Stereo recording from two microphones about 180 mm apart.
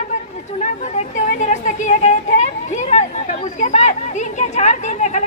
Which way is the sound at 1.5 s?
40° left (ahead or behind).